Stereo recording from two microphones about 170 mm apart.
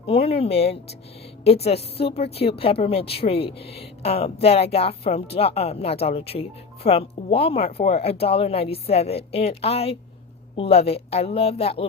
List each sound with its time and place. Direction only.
0.0 s a woman's voice: 35° left (ahead or behind)